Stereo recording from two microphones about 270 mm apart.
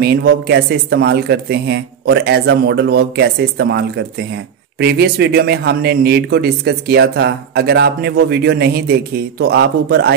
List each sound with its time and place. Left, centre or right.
0.0 s speech: right